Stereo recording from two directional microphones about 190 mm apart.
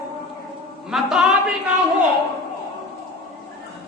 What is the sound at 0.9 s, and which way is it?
Speech, centre (ahead or behind).